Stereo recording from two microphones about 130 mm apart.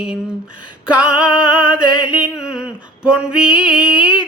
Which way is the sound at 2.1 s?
5° right (ahead or behind).